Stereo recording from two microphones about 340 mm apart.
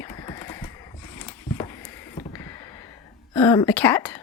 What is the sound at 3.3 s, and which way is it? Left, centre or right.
Speech, centre.